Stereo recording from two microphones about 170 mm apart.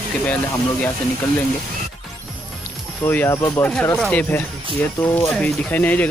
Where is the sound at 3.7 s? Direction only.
5° left (ahead or behind).